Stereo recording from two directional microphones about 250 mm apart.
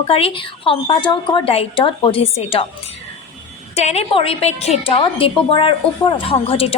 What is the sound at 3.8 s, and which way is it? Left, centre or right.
A woman's voice, left.